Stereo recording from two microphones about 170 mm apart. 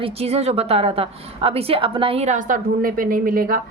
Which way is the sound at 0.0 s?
35° right (ahead or behind).